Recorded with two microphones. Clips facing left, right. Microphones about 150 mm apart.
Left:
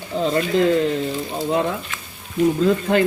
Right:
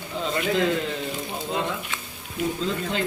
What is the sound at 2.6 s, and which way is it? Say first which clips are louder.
Speech: left 10 dB; 60° left (ahead or behind).